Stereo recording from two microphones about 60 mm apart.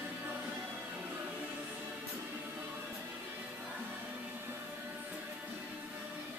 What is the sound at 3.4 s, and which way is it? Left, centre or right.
Music, right.